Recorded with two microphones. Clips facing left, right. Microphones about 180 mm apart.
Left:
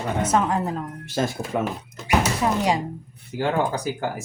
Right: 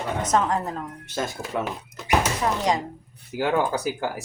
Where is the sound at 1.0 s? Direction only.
30° left (ahead or behind).